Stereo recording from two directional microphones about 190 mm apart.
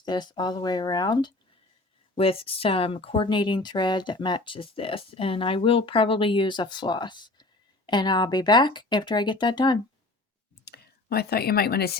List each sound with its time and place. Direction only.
0.0 s speech: 20° left (ahead or behind)
10.7 s speech: 55° left (ahead or behind)